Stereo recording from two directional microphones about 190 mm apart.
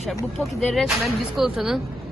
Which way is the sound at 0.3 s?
Centre (ahead or behind).